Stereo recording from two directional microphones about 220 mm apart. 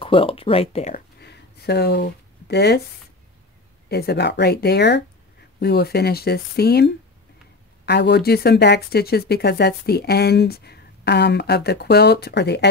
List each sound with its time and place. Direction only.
0.0 s speech: 25° left (ahead or behind)
0.9 s a sound: 50° left (ahead or behind)
3.9 s speech: 45° left (ahead or behind)